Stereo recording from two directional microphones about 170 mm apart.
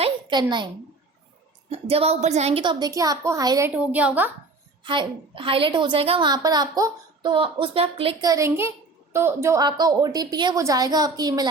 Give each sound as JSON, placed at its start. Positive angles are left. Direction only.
{"t": 0.0, "sound": "a sound", "side_deg": -25}
{"t": 1.7, "sound": "a woman's voice", "side_deg": -35}
{"t": 3.8, "sound": "a woman's voice", "side_deg": -10}
{"t": 4.8, "sound": "a woman's voice", "side_deg": -30}
{"t": 8.2, "sound": "a woman's voice", "side_deg": -20}